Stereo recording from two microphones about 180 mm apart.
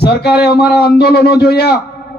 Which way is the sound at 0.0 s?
65° left (ahead or behind).